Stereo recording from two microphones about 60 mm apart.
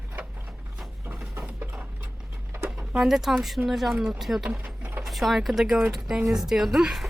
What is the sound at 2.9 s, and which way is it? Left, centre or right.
Speech, centre.